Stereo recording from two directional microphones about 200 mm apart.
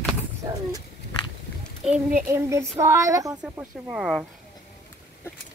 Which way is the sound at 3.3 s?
5° right (ahead or behind).